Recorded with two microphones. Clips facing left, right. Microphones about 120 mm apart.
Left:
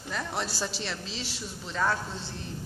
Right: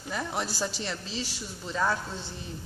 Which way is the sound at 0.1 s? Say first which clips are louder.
Right 1 dB; 5° right (ahead or behind).